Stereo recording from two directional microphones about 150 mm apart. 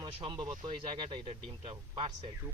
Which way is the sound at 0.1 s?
35° right (ahead or behind).